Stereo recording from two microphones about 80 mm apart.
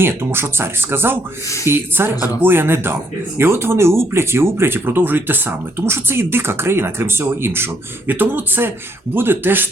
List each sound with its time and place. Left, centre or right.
0.0 s speech: right